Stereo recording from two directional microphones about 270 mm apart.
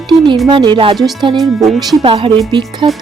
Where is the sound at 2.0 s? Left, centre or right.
Centre.